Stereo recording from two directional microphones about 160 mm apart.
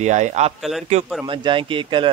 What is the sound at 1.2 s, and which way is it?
Speech, 30° right (ahead or behind).